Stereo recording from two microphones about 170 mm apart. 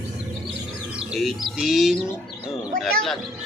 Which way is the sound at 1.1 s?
Centre (ahead or behind).